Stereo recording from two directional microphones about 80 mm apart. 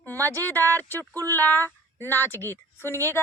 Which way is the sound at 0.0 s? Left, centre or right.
Left.